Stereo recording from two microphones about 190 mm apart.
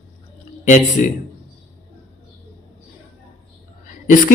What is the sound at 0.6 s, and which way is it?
Speech, 45° left (ahead or behind).